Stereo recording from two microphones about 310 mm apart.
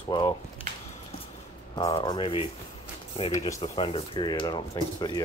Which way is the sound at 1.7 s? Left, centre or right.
Centre.